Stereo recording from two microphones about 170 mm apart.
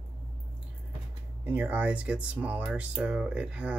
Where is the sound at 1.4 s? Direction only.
10° right (ahead or behind).